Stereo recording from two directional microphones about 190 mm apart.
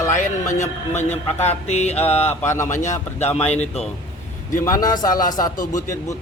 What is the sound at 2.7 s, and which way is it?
Speech, 40° left (ahead or behind).